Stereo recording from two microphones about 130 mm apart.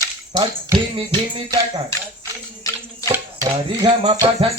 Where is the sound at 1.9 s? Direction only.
20° left (ahead or behind).